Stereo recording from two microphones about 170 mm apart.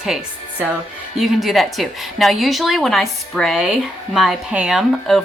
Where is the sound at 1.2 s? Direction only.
Centre (ahead or behind).